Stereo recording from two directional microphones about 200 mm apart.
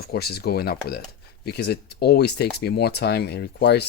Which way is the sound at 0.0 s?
50° left (ahead or behind).